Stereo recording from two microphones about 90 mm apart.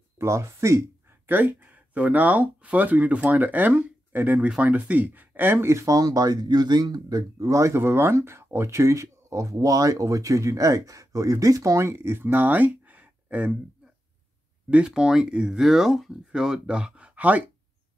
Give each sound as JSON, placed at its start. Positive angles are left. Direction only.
{"t": 0.2, "sound": "speech", "side_deg": -30}
{"t": 1.2, "sound": "speech", "side_deg": -20}
{"t": 14.7, "sound": "speech", "side_deg": -10}